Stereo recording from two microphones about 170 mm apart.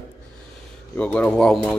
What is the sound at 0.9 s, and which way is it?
Speech, 5° left (ahead or behind).